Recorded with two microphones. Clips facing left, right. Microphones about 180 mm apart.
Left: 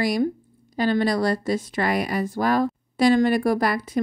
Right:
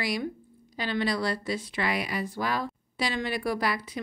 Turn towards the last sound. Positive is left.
turn(degrees=50)  # may be behind; listen again after turning